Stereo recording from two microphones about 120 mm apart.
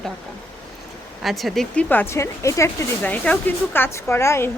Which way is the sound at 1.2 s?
Centre (ahead or behind).